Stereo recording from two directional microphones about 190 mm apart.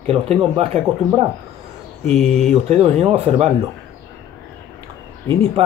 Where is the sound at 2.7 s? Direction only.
35° right (ahead or behind).